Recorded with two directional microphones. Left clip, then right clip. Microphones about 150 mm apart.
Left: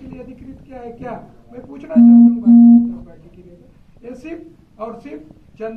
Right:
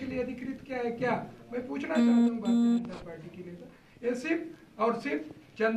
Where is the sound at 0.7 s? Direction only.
20° right (ahead or behind).